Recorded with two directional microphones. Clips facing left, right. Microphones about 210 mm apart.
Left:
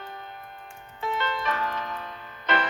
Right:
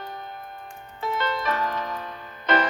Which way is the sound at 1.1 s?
45° right (ahead or behind).